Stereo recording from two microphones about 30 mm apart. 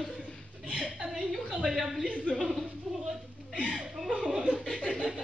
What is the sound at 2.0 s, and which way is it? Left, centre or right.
Speech, right.